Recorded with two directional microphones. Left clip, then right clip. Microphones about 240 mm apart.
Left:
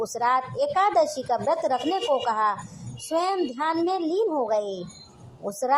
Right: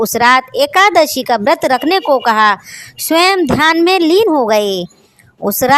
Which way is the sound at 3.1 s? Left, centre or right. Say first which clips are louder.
Right 14 dB; right.